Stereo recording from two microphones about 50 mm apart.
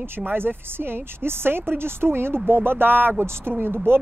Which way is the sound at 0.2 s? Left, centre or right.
Right.